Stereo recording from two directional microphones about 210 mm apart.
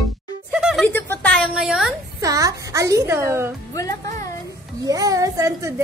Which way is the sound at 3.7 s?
15° left (ahead or behind).